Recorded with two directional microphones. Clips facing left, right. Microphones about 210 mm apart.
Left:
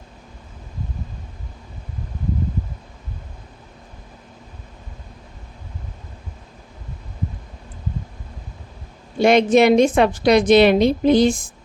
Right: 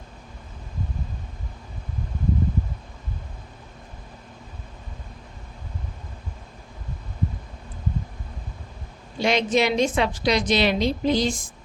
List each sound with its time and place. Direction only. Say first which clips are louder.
9.1 s a woman's voice: left 8 dB; 55° left (ahead or behind)